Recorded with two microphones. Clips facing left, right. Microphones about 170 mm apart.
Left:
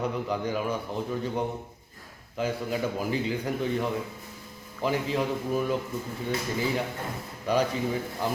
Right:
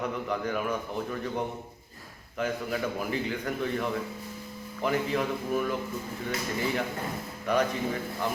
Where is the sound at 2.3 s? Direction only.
30° left (ahead or behind).